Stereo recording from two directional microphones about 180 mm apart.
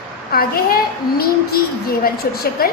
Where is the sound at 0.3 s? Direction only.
55° left (ahead or behind).